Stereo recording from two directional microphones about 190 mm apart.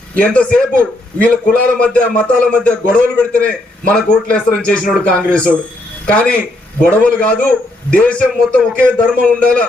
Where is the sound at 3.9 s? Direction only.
5° left (ahead or behind).